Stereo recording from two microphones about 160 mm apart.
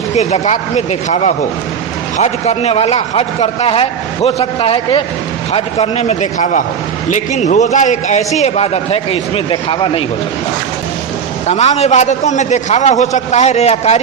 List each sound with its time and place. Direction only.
0.2 s a man's voice: 45° left (ahead or behind)
11.4 s a man's voice: 45° left (ahead or behind)